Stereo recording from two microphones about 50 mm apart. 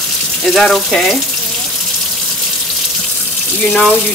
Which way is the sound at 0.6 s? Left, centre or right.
Centre.